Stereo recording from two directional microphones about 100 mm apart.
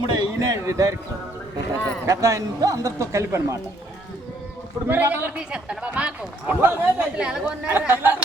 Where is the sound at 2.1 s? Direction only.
30° right (ahead or behind).